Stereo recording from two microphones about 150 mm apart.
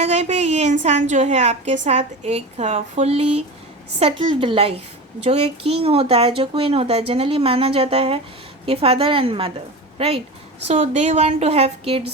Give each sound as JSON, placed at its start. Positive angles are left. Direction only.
{"t": 0.0, "sound": "a woman's voice", "side_deg": -50}
{"t": 10.7, "sound": "a woman's voice", "side_deg": -50}